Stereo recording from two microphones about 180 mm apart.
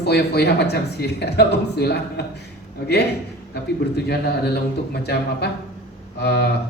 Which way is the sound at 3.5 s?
65° left (ahead or behind).